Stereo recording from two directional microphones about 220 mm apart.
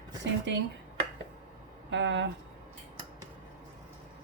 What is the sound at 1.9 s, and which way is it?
Speech, 55° right (ahead or behind).